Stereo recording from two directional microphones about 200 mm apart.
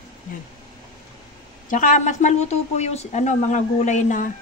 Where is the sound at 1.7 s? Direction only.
40° left (ahead or behind).